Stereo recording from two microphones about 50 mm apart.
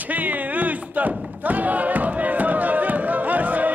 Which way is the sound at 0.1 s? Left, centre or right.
Right.